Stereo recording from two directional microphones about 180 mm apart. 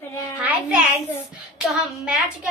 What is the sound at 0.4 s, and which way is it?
Child singing, 5° right (ahead or behind).